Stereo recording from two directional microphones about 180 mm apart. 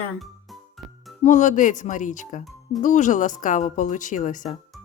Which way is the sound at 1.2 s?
45° left (ahead or behind).